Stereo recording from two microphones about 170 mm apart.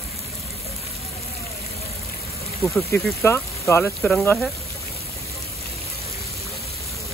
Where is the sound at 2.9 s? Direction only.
15° left (ahead or behind).